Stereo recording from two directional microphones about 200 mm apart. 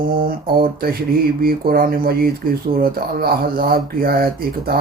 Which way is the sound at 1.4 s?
45° right (ahead or behind).